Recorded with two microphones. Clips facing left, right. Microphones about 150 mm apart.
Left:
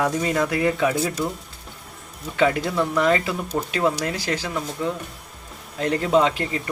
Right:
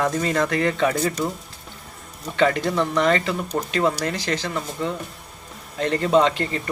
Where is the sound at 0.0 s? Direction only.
10° left (ahead or behind).